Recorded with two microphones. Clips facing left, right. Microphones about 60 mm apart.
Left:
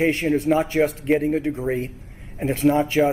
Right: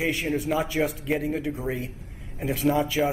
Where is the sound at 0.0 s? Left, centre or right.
Left.